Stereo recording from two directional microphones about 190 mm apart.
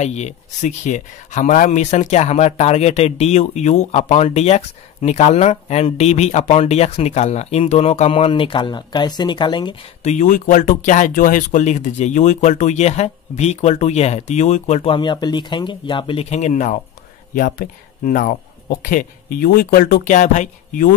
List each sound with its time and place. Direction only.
0.0 s speech: 35° left (ahead or behind)
15.0 s speech: 20° left (ahead or behind); by 20.9 s 45° left (ahead or behind)